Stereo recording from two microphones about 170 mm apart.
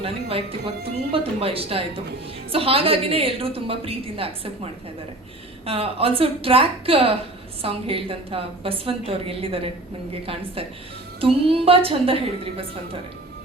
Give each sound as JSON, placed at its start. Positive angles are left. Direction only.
{"t": 0.0, "sound": "a woman's voice", "side_deg": -35}